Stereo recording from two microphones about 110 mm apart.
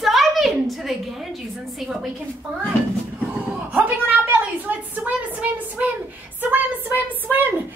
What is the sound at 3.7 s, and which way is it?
A woman's voice, 15° right (ahead or behind).